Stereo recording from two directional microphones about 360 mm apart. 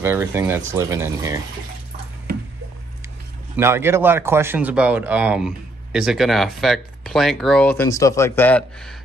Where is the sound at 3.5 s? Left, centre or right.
Centre.